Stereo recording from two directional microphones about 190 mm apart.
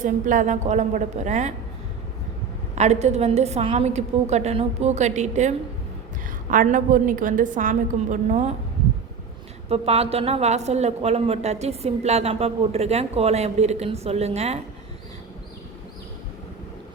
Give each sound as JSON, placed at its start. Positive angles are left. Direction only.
{"t": 0.0, "sound": "a woman's voice", "side_deg": -40}
{"t": 2.7, "sound": "a woman's voice", "side_deg": -35}
{"t": 9.6, "sound": "a woman's voice", "side_deg": -30}